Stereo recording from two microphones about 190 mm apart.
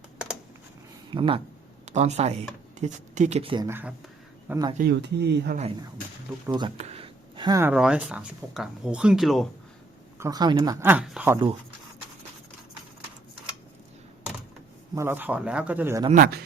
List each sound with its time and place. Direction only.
1.1 s speech: 25° right (ahead or behind)
1.8 s speech: 35° right (ahead or behind)
3.7 s speech: 10° right (ahead or behind)
4.8 s speech: 60° right (ahead or behind)
6.5 s a sound: 25° right (ahead or behind)
7.6 s speech: 5° right (ahead or behind)
10.2 s speech: 20° right (ahead or behind)
14.9 s speech: 10° right (ahead or behind)
16.1 s speech: 50° right (ahead or behind)